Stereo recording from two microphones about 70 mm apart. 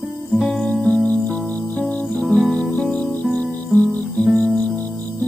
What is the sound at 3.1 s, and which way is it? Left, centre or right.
Music, left.